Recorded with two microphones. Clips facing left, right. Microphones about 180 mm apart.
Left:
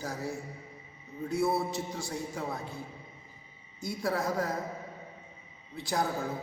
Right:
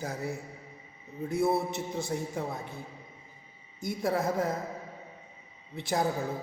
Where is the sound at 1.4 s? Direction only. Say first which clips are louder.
Right 2 dB; 20° right (ahead or behind).